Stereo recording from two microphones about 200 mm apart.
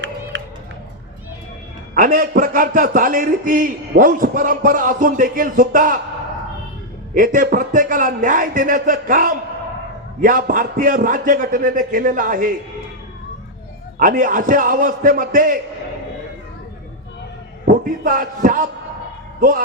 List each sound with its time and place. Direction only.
0.3 s a sound: 60° right (ahead or behind)
2.0 s a man's voice: 40° right (ahead or behind)
7.1 s a man's voice: 40° right (ahead or behind)
14.0 s a man's voice: 40° right (ahead or behind)
17.7 s a man's voice: 45° right (ahead or behind)